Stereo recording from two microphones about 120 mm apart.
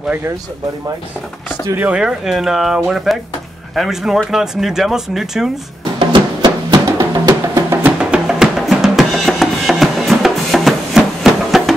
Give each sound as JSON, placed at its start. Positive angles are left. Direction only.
{"t": 1.8, "sound": "speech", "side_deg": -10}
{"t": 5.9, "sound": "music", "side_deg": -40}
{"t": 7.8, "sound": "drum", "side_deg": -10}